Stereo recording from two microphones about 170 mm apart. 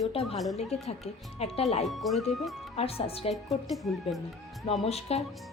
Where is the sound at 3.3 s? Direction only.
Centre (ahead or behind).